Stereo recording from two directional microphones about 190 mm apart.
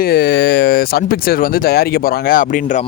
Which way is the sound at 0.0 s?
60° left (ahead or behind).